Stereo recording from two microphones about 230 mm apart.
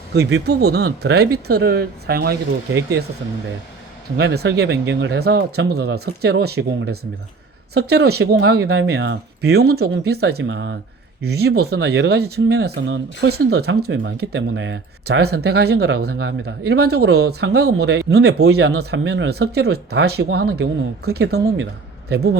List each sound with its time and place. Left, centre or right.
0.1 s speech: right
4.2 s speech: right